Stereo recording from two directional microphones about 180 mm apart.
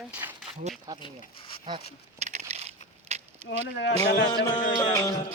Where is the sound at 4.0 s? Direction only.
20° left (ahead or behind).